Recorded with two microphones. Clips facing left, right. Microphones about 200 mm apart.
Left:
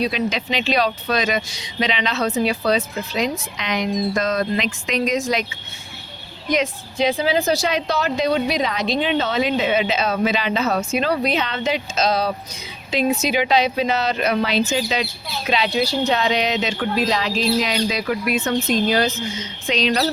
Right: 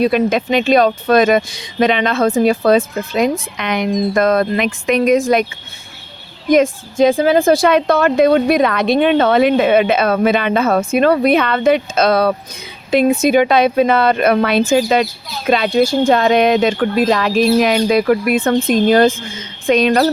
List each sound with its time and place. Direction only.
0.0 s speech: 50° right (ahead or behind)
6.5 s a woman's voice: 50° right (ahead or behind)